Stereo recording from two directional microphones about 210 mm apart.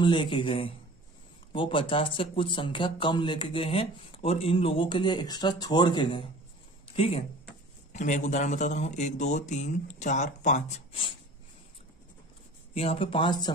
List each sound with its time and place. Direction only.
0.0 s speech: 20° left (ahead or behind)
12.7 s speech: 25° left (ahead or behind)